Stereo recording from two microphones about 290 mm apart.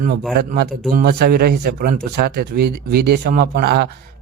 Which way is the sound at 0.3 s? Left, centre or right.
Right.